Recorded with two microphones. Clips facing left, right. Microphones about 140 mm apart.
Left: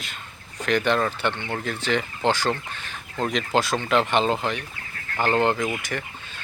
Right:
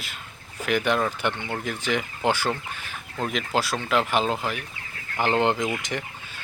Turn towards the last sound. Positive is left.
turn(degrees=-20)  # may be behind; listen again after turning